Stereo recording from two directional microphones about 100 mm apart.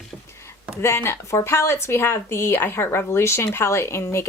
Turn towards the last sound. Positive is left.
turn(degrees=25)  # may be behind; listen again after turning